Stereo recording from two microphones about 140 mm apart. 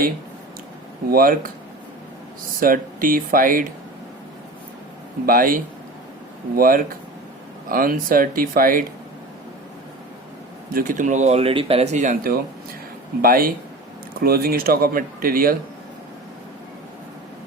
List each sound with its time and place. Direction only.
1.1 s speech: 90° right
2.6 s speech: 85° right
5.2 s speech: 85° right
10.7 s speech: 85° right
13.2 s speech: 90° right